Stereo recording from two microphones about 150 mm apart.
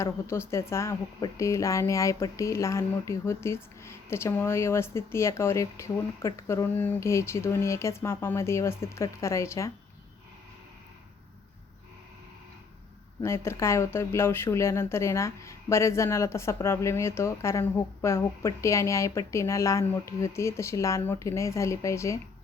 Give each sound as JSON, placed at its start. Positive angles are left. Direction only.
{"t": 0.0, "sound": "speech", "side_deg": 15}
{"t": 13.2, "sound": "speech", "side_deg": 15}